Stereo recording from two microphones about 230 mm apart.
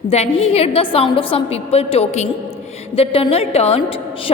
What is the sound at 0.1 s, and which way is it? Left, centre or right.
A woman's voice, left.